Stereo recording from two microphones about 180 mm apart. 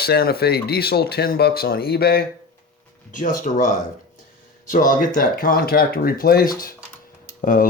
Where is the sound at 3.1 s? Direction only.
45° left (ahead or behind).